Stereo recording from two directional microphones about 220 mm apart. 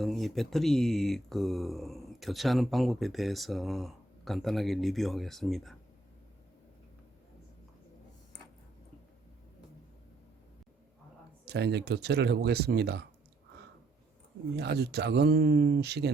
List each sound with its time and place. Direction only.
0.0 s speech: centre (ahead or behind)
11.4 s speech: 50° right (ahead or behind)
14.5 s speech: 50° right (ahead or behind)